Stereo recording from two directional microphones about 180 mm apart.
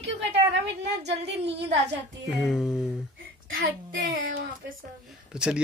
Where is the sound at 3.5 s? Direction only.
55° right (ahead or behind).